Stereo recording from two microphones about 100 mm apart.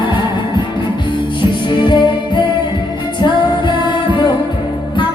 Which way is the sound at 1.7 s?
50° left (ahead or behind).